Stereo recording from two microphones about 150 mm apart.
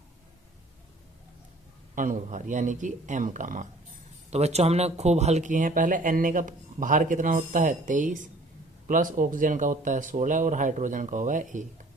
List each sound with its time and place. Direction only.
2.0 s speech: 60° right (ahead or behind)
4.3 s speech: 45° right (ahead or behind)